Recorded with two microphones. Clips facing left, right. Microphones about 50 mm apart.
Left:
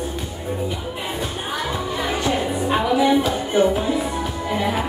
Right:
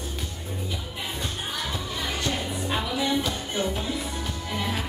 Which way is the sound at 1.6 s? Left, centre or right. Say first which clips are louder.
Left 9 dB; centre.